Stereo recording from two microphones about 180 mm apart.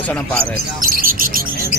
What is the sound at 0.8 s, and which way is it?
Bird, 50° right (ahead or behind).